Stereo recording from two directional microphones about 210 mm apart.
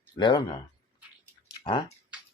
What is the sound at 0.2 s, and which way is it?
Speech, 20° left (ahead or behind).